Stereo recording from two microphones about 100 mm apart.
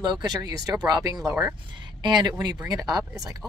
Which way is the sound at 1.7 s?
50° right (ahead or behind).